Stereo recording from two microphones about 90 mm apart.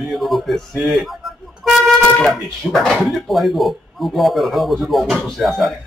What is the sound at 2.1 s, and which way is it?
Speech, 5° left (ahead or behind).